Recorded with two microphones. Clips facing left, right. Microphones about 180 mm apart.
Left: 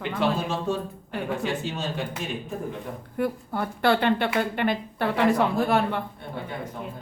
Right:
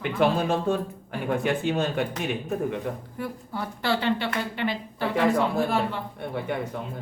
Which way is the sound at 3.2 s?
55° left (ahead or behind).